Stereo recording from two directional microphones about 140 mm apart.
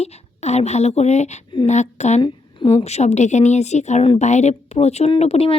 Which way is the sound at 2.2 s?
40° left (ahead or behind).